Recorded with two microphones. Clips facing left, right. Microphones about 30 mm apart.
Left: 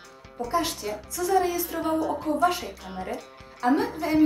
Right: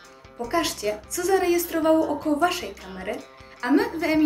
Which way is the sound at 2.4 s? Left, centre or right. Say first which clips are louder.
Right 1 dB; right.